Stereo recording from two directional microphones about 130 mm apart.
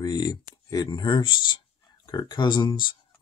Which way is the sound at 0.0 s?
30° left (ahead or behind).